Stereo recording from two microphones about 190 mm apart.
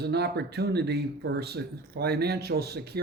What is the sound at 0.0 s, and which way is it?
Speech, 60° right (ahead or behind).